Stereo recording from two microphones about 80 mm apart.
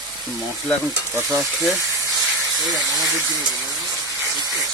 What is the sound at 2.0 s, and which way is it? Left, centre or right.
Hiss, right.